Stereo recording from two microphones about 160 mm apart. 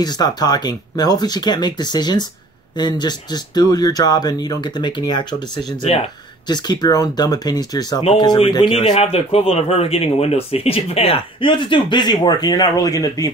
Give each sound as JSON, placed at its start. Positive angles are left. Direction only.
{"t": 0.0, "sound": "speech", "side_deg": 25}
{"t": 8.0, "sound": "a man's voice", "side_deg": 35}